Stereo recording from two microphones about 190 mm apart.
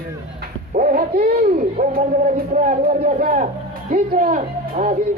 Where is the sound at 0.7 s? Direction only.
45° right (ahead or behind).